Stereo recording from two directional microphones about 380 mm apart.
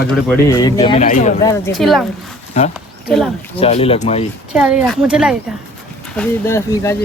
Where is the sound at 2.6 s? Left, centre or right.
Centre.